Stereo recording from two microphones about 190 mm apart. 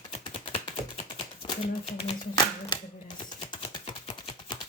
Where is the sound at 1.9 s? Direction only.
30° left (ahead or behind).